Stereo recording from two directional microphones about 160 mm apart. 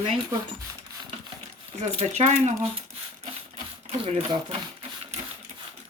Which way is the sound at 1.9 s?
45° right (ahead or behind).